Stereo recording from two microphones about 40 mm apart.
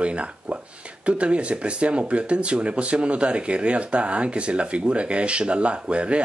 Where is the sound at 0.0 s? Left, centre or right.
Right.